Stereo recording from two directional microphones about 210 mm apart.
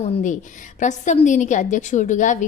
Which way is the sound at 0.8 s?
35° left (ahead or behind).